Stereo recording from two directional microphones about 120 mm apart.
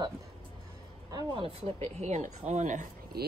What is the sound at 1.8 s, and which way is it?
Speech, 70° right (ahead or behind).